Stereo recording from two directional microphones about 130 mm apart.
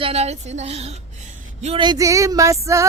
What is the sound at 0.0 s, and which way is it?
Speech, 55° right (ahead or behind).